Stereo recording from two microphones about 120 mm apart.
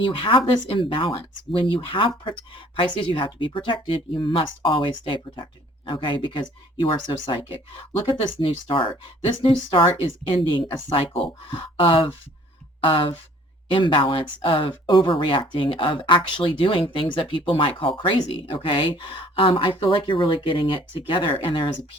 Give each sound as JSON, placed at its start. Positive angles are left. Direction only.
{"t": 0.0, "sound": "speech", "side_deg": 45}